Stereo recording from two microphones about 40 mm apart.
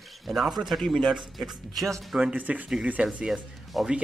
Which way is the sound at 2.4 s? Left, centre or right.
Right.